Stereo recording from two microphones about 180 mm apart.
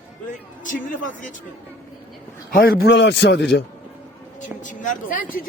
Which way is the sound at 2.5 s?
55° left (ahead or behind).